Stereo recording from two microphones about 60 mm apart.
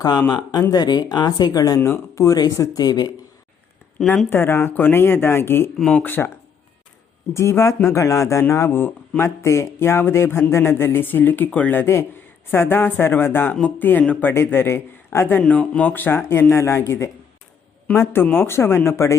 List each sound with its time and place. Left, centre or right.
0.0 s speech: left
1.8 s speech: left
4.3 s speech: left
5.7 s speech: centre
6.0 s speech: left
7.3 s speech: left
8.7 s speech: left
9.2 s speech: left
14.3 s a man's voice: left
15.3 s speech: left